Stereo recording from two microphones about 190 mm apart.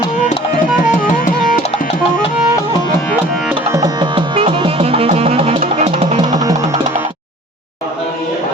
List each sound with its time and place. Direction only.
0.9 s music: 45° left (ahead or behind)
3.7 s music: 20° right (ahead or behind)
6.3 s music: 20° right (ahead or behind)